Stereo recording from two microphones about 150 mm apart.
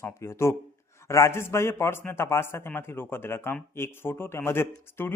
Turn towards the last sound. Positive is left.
turn(degrees=15)  # may be behind; listen again after turning